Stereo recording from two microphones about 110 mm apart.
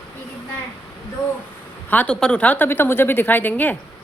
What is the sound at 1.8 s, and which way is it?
A woman's voice, 15° left (ahead or behind).